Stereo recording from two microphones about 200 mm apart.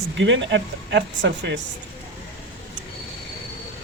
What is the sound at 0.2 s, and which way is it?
Speech, 65° right (ahead or behind).